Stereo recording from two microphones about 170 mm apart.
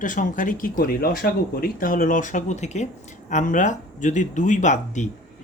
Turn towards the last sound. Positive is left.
turn(degrees=45)  # may be behind; listen again after turning